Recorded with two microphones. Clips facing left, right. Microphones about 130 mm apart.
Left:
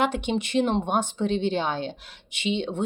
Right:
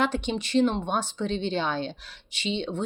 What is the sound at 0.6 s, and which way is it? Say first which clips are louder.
Speech: left 1 dB; 20° left (ahead or behind).